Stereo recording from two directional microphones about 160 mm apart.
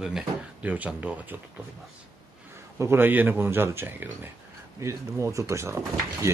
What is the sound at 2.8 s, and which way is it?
Speech, 15° right (ahead or behind).